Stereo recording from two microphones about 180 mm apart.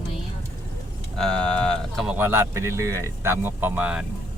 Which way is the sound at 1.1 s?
5° left (ahead or behind).